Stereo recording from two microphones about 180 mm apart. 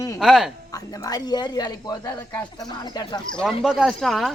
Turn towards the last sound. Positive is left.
turn(degrees=0)  # may be behind; listen again after turning